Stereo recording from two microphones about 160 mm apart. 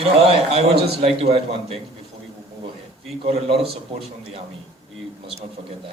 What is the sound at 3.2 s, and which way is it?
Speech, 40° right (ahead or behind).